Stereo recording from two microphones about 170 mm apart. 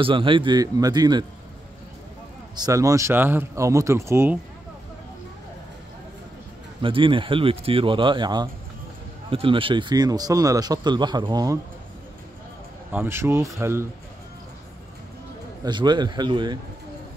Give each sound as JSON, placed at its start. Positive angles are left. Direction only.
{"t": 0.0, "sound": "speech", "side_deg": -30}
{"t": 2.5, "sound": "speech", "side_deg": -20}
{"t": 6.8, "sound": "speech", "side_deg": -30}
{"t": 12.9, "sound": "speech", "side_deg": -15}
{"t": 15.6, "sound": "speech", "side_deg": -25}